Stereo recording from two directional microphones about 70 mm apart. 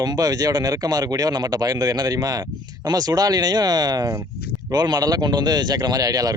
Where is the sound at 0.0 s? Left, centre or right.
Right.